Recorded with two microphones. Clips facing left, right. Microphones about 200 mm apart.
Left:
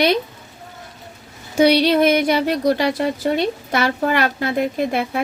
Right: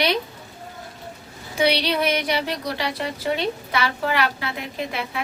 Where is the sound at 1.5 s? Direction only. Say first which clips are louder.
Left 7 dB; 45° left (ahead or behind).